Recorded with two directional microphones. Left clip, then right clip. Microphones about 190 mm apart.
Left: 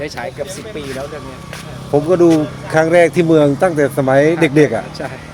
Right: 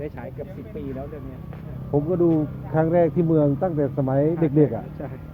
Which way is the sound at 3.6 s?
45° left (ahead or behind).